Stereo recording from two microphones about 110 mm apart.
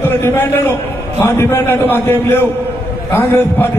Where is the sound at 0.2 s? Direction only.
20° left (ahead or behind).